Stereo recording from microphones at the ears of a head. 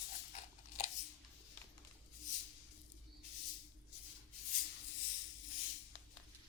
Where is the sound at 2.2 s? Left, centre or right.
Left.